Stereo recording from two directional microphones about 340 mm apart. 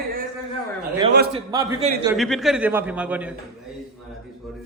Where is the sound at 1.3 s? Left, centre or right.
Centre.